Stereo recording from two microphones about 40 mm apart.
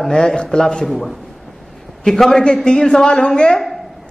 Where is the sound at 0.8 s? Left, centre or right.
Centre.